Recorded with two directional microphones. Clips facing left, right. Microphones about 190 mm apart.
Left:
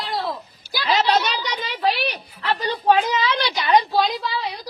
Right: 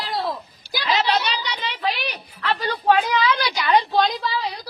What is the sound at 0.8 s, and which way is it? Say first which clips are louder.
A woman's voice: left 2 dB; 40° left (ahead or behind).